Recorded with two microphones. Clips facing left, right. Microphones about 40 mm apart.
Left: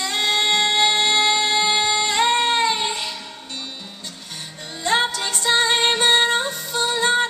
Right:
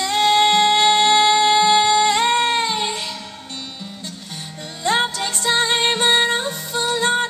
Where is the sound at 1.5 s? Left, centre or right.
Centre; by 3.2 s left.